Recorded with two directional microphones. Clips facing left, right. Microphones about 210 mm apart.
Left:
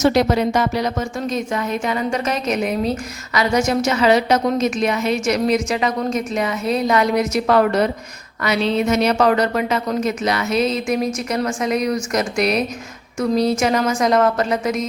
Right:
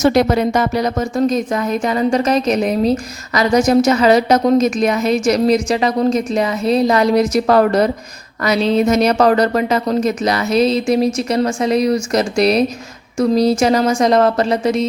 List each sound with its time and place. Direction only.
0.0 s speech: 50° right (ahead or behind); by 14.8 s 30° right (ahead or behind)